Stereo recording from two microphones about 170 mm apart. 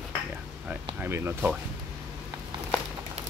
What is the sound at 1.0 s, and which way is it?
Speech, 15° right (ahead or behind).